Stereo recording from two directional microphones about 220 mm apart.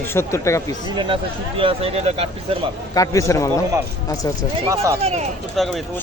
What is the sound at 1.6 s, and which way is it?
Speech, 25° right (ahead or behind).